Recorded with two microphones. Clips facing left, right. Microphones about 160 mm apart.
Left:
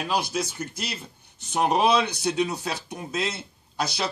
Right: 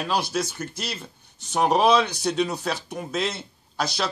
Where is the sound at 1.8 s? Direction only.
15° left (ahead or behind).